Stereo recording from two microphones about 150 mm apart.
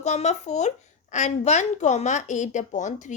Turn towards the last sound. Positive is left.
turn(degrees=55)  # may be behind; listen again after turning